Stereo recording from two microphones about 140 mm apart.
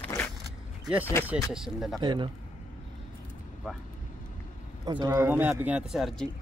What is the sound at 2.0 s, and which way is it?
Speech, 35° right (ahead or behind).